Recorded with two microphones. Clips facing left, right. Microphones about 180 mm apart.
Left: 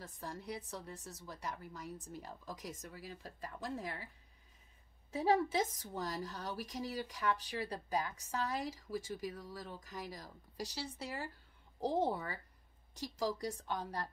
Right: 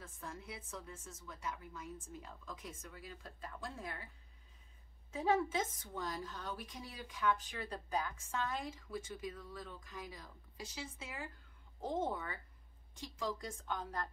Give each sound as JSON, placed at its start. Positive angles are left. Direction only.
{"t": 0.0, "sound": "a woman's voice", "side_deg": 35}
{"t": 5.1, "sound": "a woman's voice", "side_deg": 40}